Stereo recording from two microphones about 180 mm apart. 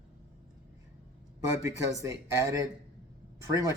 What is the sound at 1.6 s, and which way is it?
Speech, 15° right (ahead or behind).